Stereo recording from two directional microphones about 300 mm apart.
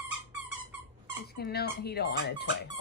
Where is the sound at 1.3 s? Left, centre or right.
Left.